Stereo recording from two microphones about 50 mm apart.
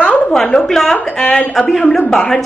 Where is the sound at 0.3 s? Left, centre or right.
Centre.